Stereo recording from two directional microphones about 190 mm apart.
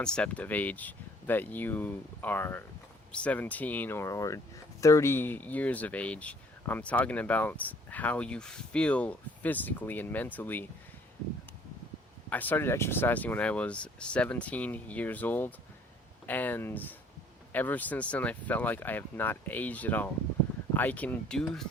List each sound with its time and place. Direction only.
0.0 s speech: 5° left (ahead or behind)
12.3 s speech: 10° left (ahead or behind)